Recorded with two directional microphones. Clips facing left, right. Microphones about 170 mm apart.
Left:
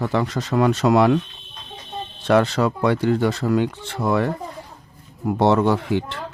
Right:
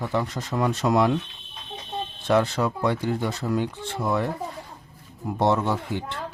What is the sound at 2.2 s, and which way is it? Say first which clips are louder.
Speech: left 4 dB; 75° left (ahead or behind).